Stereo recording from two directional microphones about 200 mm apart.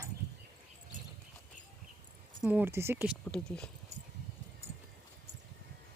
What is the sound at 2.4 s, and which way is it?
Speech, 10° right (ahead or behind).